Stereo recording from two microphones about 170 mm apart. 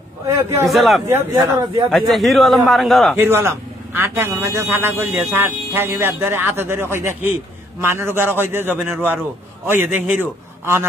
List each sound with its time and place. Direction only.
0.7 s a man's voice: centre (ahead or behind)
1.0 s a man's voice: 15° right (ahead or behind)
1.9 s a man's voice: centre (ahead or behind)
3.2 s a man's voice: 15° right (ahead or behind)